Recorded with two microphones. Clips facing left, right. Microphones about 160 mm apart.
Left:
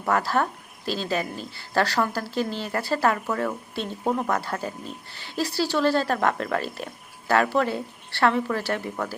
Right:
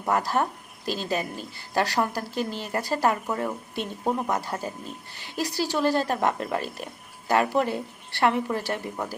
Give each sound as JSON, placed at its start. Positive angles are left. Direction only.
{"t": 0.0, "sound": "a woman's voice", "side_deg": -15}